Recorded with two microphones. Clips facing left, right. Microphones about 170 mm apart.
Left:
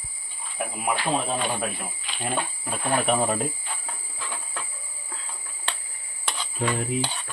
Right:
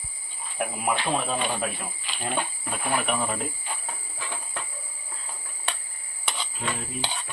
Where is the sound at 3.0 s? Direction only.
30° left (ahead or behind).